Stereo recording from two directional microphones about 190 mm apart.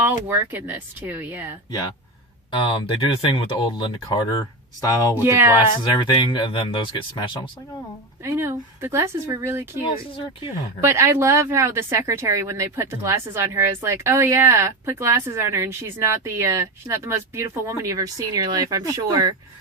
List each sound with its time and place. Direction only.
0.3 s speech: 10° right (ahead or behind)
2.6 s speech: 25° left (ahead or behind)
5.1 s speech: 10° right (ahead or behind)
5.9 s speech: 25° left (ahead or behind)
8.2 s speech: 15° right (ahead or behind)